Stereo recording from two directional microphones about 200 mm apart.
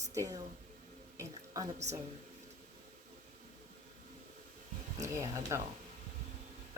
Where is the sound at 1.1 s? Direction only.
15° right (ahead or behind).